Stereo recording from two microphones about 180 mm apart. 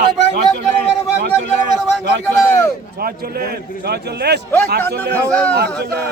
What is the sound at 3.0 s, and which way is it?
A man's voice, 55° right (ahead or behind).